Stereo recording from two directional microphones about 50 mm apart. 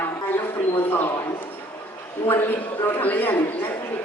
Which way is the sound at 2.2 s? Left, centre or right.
Left.